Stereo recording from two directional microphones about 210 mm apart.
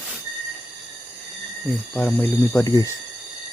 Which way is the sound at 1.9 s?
10° left (ahead or behind).